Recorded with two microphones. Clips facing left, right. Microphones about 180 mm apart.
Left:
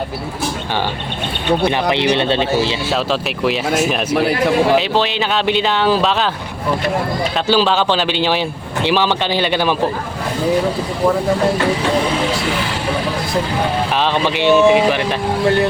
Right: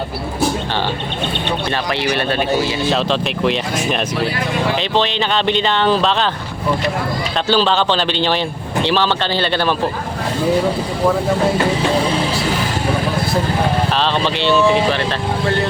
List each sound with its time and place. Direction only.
1.7 s speech: 20° left (ahead or behind)
2.9 s speech: 5° left (ahead or behind)
7.4 s speech: 10° left (ahead or behind)
13.9 s speech: 15° left (ahead or behind)